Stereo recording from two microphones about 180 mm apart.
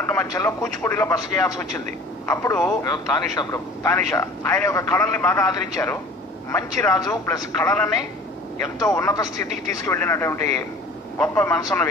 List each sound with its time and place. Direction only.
0.1 s speech: 15° left (ahead or behind)